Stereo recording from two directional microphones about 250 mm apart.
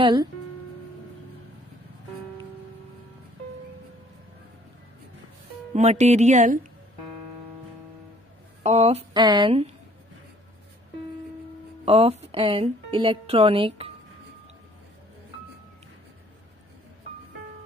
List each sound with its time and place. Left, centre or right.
0.0 s speech: centre
5.7 s speech: right
8.6 s speech: right
11.8 s speech: right